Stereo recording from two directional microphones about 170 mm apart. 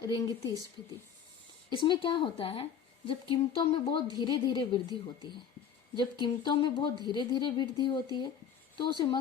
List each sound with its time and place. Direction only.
0.0 s speech: 25° left (ahead or behind)
1.7 s speech: 30° left (ahead or behind)